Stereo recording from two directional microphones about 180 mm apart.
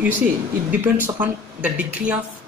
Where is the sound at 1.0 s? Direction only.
10° right (ahead or behind).